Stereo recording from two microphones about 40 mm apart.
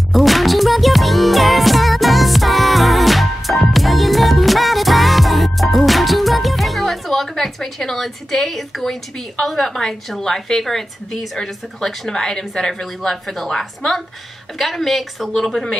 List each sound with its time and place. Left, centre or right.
0.1 s music: centre
9.4 s a woman's voice: centre